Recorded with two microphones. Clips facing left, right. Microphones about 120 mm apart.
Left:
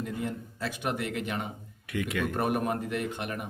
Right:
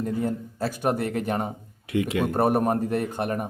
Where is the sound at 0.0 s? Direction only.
40° right (ahead or behind).